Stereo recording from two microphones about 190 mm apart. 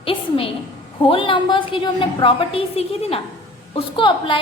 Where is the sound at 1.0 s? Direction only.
25° left (ahead or behind).